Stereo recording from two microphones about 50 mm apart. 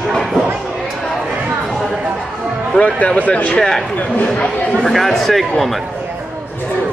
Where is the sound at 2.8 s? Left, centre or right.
Left.